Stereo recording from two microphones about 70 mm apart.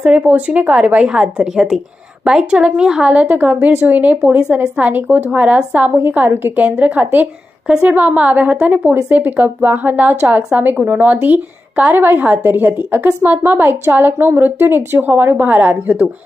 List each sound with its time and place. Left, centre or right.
0.0 s a woman's voice: centre
3.1 s a woman's voice: right